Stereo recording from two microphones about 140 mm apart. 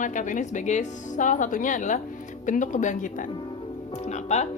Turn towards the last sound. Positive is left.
turn(degrees=55)  # may be behind; listen again after turning